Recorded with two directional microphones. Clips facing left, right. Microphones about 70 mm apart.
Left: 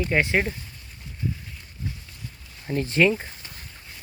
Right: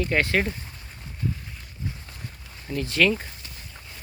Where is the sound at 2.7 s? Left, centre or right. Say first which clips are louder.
Left 2 dB; left.